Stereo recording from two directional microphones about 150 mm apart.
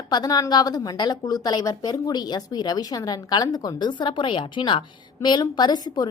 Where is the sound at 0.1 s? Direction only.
25° left (ahead or behind).